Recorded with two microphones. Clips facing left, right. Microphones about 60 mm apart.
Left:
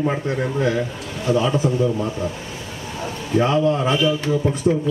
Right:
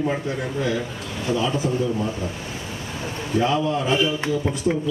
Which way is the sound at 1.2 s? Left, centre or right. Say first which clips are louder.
Left 4 dB; left.